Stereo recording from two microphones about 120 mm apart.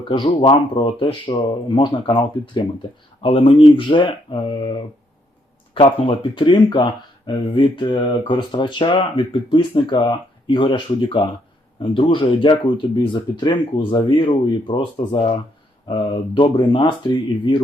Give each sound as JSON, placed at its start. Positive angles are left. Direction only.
{"t": 0.0, "sound": "speech", "side_deg": 45}
{"t": 5.7, "sound": "speech", "side_deg": 50}